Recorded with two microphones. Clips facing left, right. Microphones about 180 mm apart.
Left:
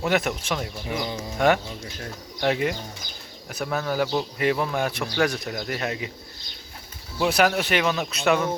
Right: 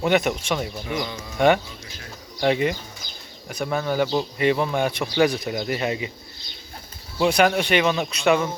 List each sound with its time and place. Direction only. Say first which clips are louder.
0.0 s speech: right 3 dB; centre (ahead or behind)
0.9 s speech: even; 30° left (ahead or behind)
2.4 s speech: right 3 dB; centre (ahead or behind)
7.3 s speech: right 2 dB; 5° left (ahead or behind)